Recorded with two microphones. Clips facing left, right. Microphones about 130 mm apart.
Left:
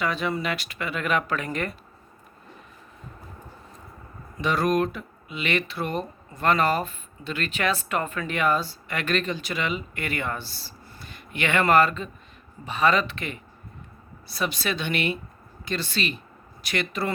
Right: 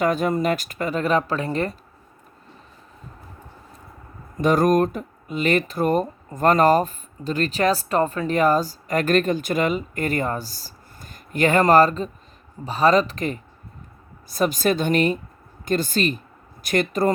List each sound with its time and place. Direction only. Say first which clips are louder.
0.0 s speech: right 6 dB; 45° right (ahead or behind)
4.4 s speech: right 6 dB; 45° right (ahead or behind)